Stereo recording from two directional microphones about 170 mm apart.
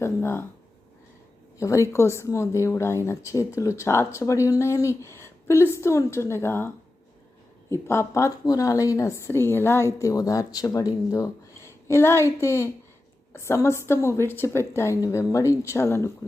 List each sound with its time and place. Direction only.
0.0 s speech: 15° left (ahead or behind)
1.5 s speech: 20° left (ahead or behind)
7.7 s speech: 15° left (ahead or behind)